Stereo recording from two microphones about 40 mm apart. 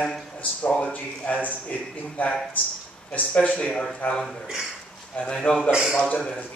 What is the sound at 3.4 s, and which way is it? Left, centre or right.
A man's voice, left.